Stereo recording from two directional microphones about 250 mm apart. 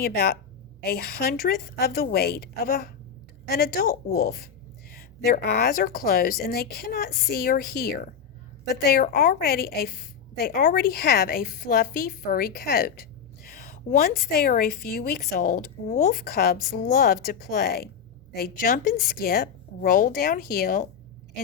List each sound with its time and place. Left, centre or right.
0.0 s a woman's voice: left